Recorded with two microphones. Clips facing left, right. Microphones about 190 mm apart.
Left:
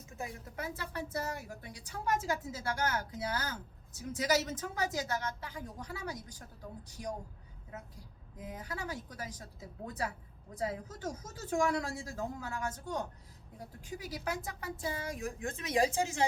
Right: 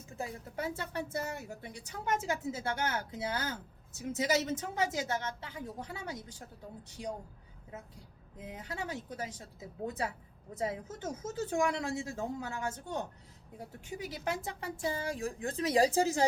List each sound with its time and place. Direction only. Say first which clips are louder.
0.2 s a woman's voice: right 3 dB; 30° right (ahead or behind)
8.4 s a woman's voice: right 1 dB; 25° right (ahead or behind)